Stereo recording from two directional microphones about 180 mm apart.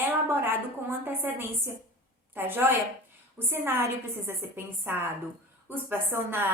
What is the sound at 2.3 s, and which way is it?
A woman's voice, 10° right (ahead or behind).